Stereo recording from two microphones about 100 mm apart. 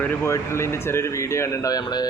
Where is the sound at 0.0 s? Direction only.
20° left (ahead or behind).